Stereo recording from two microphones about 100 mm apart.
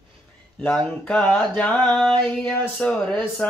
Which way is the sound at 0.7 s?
10° left (ahead or behind).